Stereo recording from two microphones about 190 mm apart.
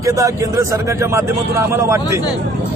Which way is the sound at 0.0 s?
15° right (ahead or behind).